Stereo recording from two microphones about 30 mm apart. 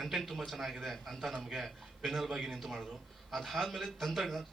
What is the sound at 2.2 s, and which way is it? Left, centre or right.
A man's voice, centre.